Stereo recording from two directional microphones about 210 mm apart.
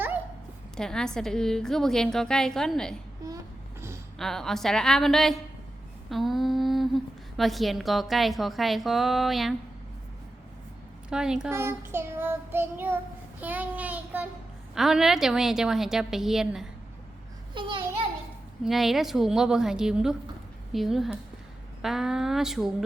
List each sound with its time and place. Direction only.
0.8 s a woman's voice: 5° left (ahead or behind)
3.2 s a sound: 15° right (ahead or behind)
4.2 s a woman's voice: centre (ahead or behind)
11.1 s child singing: 5° right (ahead or behind)
14.8 s a woman's voice: centre (ahead or behind)
17.5 s a child's voice: 25° right (ahead or behind)
18.6 s a woman's voice: centre (ahead or behind)